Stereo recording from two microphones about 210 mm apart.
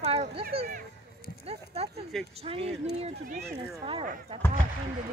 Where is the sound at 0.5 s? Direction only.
30° right (ahead or behind).